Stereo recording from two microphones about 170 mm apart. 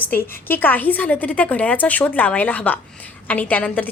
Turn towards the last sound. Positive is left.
turn(degrees=10)  # may be behind; listen again after turning